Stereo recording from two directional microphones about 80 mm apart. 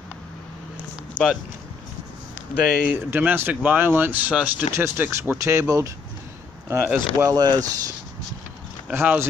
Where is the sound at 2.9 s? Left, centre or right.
Right.